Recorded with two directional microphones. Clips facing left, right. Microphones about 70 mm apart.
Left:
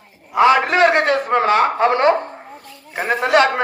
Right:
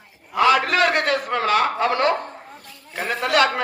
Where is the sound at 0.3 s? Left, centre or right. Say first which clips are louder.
Left 4 dB; left.